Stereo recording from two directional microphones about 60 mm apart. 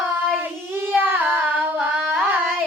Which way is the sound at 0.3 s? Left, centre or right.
Right.